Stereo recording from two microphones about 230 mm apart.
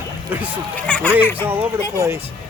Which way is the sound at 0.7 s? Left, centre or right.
Centre.